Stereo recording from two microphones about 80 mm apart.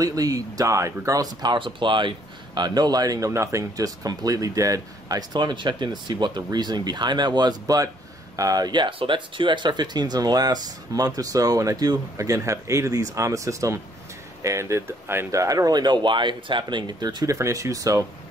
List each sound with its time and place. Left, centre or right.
0.0 s speech: right
1.4 s speech: right
15.3 s speech: right
17.3 s speech: right